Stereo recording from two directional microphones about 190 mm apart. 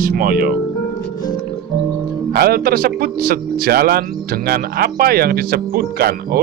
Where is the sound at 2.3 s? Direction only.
55° right (ahead or behind).